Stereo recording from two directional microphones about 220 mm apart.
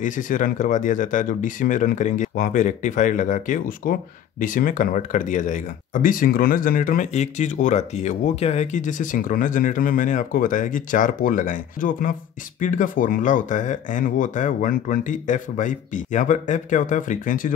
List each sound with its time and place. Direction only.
0.0 s speech: 35° left (ahead or behind)